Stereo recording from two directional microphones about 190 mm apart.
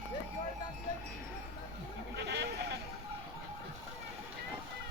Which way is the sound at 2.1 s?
65° right (ahead or behind).